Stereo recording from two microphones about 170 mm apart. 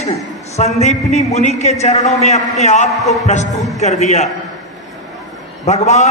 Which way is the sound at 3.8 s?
40° left (ahead or behind).